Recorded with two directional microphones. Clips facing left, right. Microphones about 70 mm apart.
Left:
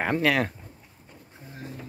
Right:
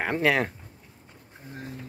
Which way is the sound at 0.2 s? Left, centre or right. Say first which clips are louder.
Right 2 dB; centre.